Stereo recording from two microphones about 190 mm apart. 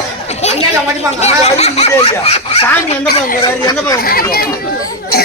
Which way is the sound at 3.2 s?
25° left (ahead or behind).